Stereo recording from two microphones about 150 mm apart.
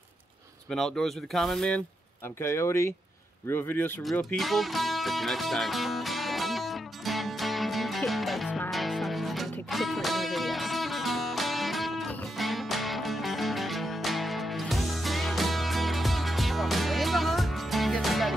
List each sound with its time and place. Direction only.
0.7 s speech: 5° left (ahead or behind)
2.4 s speech: 20° left (ahead or behind)
4.0 s music: centre (ahead or behind)